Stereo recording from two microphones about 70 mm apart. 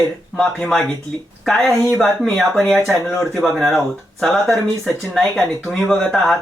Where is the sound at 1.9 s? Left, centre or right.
Centre.